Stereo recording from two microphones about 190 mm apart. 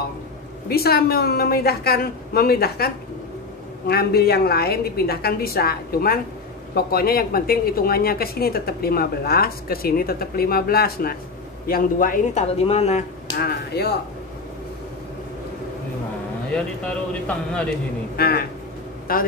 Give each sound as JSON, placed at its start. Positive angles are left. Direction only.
{"t": 0.7, "sound": "a woman's voice", "side_deg": 55}
{"t": 12.6, "sound": "speech", "side_deg": 35}
{"t": 13.4, "sound": "a woman's voice", "side_deg": 55}
{"t": 17.1, "sound": "speech", "side_deg": 5}
{"t": 18.1, "sound": "a man's voice", "side_deg": 55}